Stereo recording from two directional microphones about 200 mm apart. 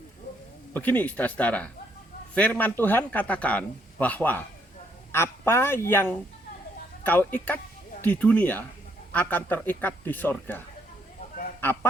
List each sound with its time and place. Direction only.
0.7 s a man's voice: 10° left (ahead or behind)
11.6 s goose: 10° left (ahead or behind)